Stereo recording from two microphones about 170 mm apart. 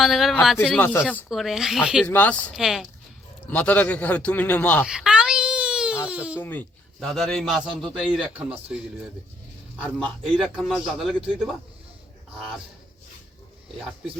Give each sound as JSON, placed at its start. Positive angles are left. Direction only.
{"t": 0.0, "sound": "a man's voice", "side_deg": 0}
{"t": 2.0, "sound": "a man's voice", "side_deg": 10}
{"t": 2.6, "sound": "a man's voice", "side_deg": 0}
{"t": 3.5, "sound": "a man's voice", "side_deg": 10}
{"t": 4.9, "sound": "wail", "side_deg": -5}
{"t": 6.4, "sound": "a man's voice", "side_deg": 10}
{"t": 10.0, "sound": "a man's voice", "side_deg": 0}